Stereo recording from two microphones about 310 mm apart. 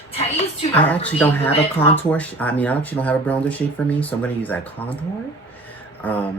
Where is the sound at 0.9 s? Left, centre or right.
Centre.